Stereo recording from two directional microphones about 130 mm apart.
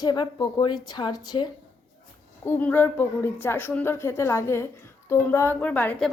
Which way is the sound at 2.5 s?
15° left (ahead or behind).